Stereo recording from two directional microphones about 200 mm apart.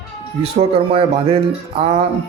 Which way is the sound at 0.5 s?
30° right (ahead or behind).